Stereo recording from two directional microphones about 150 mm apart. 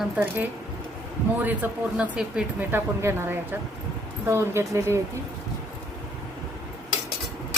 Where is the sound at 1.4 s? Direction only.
10° right (ahead or behind).